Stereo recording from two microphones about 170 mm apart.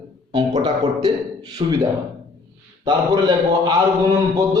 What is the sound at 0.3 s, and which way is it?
A man's voice, 25° right (ahead or behind).